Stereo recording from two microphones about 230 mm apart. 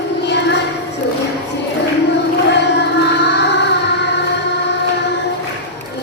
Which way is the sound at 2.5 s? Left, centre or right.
Left.